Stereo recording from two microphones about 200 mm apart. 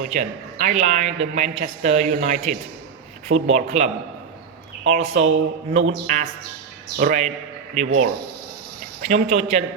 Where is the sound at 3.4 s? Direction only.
35° right (ahead or behind).